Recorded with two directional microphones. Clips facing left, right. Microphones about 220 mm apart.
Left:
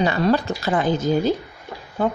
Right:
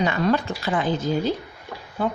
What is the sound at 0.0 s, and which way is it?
Speech, 35° left (ahead or behind).